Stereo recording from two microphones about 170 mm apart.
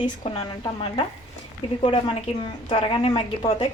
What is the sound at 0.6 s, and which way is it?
A woman's voice, 30° left (ahead or behind).